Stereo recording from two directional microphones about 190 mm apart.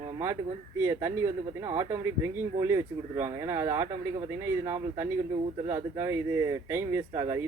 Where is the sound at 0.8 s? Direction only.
15° right (ahead or behind).